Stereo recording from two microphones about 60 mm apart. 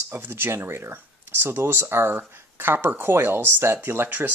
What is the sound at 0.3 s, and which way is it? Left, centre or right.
Speech, right.